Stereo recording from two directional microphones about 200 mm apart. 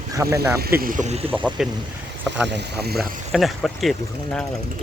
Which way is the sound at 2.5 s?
55° right (ahead or behind).